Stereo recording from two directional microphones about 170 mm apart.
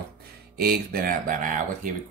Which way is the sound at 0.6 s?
60° right (ahead or behind).